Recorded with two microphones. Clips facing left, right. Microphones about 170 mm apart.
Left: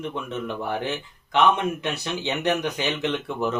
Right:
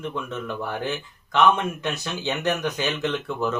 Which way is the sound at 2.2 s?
15° left (ahead or behind).